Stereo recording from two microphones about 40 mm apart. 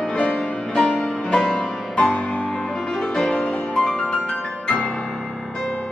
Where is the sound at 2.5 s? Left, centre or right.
Left.